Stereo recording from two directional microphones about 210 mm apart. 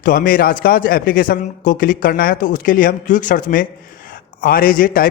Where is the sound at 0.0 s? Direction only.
40° left (ahead or behind).